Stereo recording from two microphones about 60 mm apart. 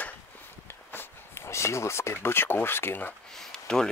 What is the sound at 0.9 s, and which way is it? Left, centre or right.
Speech, left.